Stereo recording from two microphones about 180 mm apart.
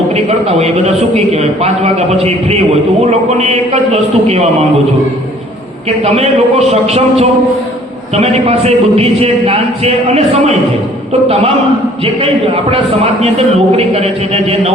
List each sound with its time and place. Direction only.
0.1 s a man's voice: 35° right (ahead or behind)
6.0 s a man's voice: 35° right (ahead or behind)
12.7 s a man's voice: 35° right (ahead or behind)